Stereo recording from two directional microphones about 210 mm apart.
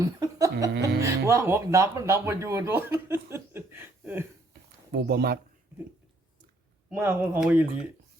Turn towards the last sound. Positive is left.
turn(degrees=-10)  # may be behind; listen again after turning